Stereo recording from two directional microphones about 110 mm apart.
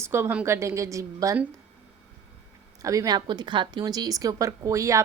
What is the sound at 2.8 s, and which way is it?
A woman's voice, 30° right (ahead or behind).